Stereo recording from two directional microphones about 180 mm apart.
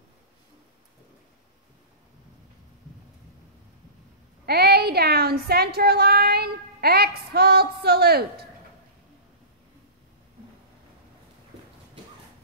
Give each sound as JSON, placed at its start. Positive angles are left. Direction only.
{"t": 4.5, "sound": "speech", "side_deg": -60}